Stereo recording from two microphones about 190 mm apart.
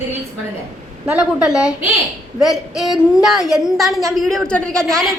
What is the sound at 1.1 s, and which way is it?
A woman's voice, 5° right (ahead or behind).